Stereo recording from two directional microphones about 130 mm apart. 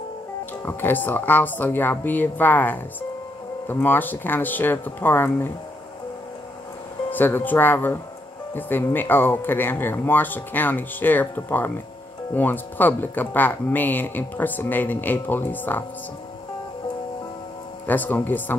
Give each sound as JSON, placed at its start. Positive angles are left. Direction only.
{"t": 0.7, "sound": "speech", "side_deg": 15}
{"t": 7.1, "sound": "speech", "side_deg": 15}
{"t": 17.8, "sound": "speech", "side_deg": 15}